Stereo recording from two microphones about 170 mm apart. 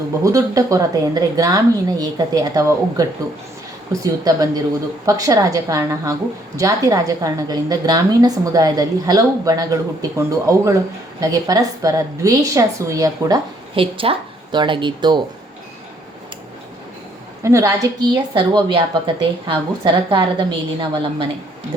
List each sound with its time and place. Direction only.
0.3 s a woman's voice: 20° right (ahead or behind)
17.4 s a woman's voice: 20° right (ahead or behind)